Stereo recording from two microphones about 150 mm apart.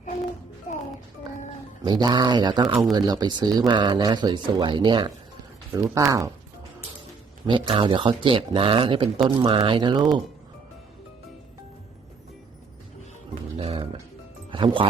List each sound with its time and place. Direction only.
0.7 s music: 50° left (ahead or behind)
1.8 s speech: 25° right (ahead or behind)
5.7 s speech: 20° right (ahead or behind)
7.4 s speech: 30° right (ahead or behind)
13.6 s music: 40° right (ahead or behind)
14.5 s speech: 35° right (ahead or behind)